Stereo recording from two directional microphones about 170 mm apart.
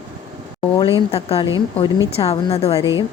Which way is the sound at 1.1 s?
35° left (ahead or behind).